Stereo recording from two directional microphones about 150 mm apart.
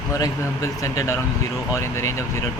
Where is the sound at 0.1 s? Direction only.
20° left (ahead or behind).